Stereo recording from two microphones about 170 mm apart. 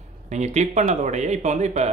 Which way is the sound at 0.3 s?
45° right (ahead or behind).